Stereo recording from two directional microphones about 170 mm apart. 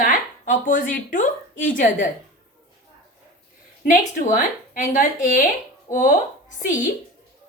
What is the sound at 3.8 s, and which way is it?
A woman's voice, 50° left (ahead or behind).